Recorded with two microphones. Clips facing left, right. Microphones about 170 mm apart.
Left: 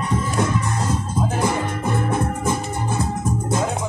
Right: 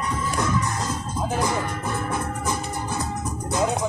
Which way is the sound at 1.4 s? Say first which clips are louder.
Left 2 dB; 20° left (ahead or behind).